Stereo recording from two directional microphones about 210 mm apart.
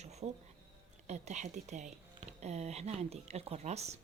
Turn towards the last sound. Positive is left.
turn(degrees=-30)  # may be behind; listen again after turning